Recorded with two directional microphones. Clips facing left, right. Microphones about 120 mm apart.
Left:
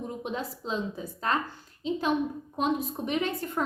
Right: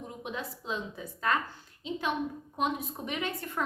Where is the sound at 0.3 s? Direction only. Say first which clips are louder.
Left 2 dB; 30° left (ahead or behind).